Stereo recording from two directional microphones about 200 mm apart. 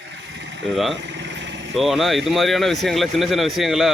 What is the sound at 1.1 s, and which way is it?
Vehicle, 65° right (ahead or behind).